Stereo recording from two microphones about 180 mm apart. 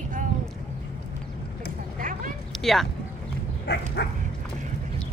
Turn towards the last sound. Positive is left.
turn(degrees=75)  # may be behind; listen again after turning